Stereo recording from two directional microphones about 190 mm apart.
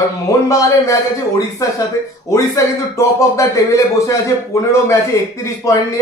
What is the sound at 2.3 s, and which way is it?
Speech, 15° left (ahead or behind).